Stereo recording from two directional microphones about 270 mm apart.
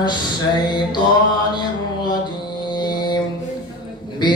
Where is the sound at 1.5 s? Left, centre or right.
Centre.